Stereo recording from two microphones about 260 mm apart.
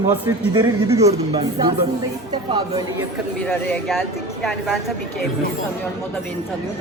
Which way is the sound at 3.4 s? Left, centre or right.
Centre.